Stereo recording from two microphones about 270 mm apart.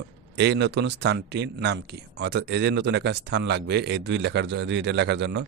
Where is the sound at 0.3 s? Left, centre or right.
Right.